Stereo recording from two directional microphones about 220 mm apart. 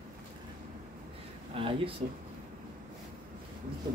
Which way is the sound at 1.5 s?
25° right (ahead or behind).